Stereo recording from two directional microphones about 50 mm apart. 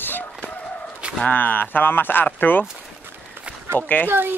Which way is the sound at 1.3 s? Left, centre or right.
Left.